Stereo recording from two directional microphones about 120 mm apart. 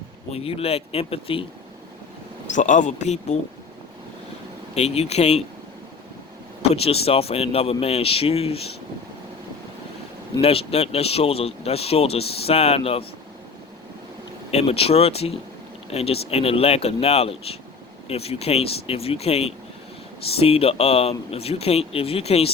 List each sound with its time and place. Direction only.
0.3 s speech: 55° left (ahead or behind)
2.5 s a man's voice: 90° left; by 3.3 s 75° left (ahead or behind)
4.7 s speech: 65° left (ahead or behind)
6.6 s speech: 55° left (ahead or behind)
10.4 s speech: 55° left (ahead or behind)
14.5 s speech: 55° left (ahead or behind)